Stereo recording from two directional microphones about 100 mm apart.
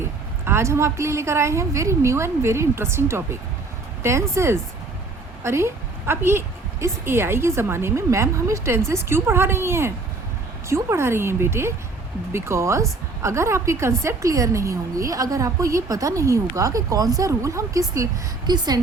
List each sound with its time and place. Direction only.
0.0 s a woman's voice: 25° right (ahead or behind); by 18.8 s 45° right (ahead or behind)